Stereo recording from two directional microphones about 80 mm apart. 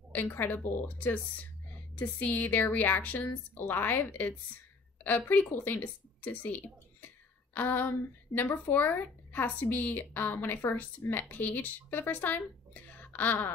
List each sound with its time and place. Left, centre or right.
0.1 s a woman's voice: left